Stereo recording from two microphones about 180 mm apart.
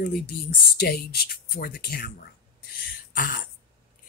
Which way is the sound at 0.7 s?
60° left (ahead or behind).